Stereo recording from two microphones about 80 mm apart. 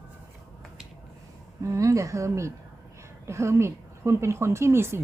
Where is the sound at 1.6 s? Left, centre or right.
Right.